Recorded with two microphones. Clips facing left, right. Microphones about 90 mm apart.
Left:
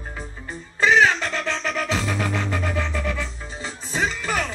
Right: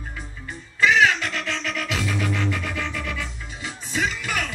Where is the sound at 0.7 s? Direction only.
35° left (ahead or behind).